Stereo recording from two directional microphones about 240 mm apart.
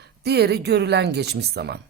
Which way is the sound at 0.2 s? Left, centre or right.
Right.